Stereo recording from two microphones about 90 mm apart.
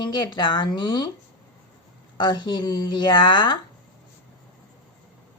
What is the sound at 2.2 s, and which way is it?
A woman's voice, 55° left (ahead or behind).